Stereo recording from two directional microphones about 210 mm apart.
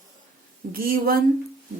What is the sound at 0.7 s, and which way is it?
Speech, 45° right (ahead or behind).